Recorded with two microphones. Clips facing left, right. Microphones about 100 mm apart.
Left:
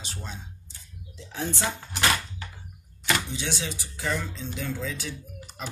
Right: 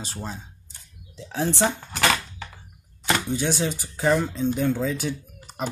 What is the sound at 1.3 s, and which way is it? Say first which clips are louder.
Speech: right 7 dB; 75° right (ahead or behind).